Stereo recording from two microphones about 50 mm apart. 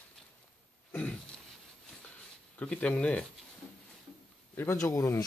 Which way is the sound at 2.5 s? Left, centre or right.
Left.